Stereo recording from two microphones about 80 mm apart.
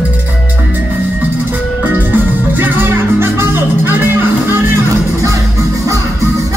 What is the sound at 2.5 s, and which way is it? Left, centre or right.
Music, right.